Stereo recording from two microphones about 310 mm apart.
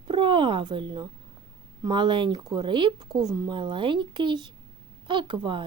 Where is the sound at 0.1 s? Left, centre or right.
Centre.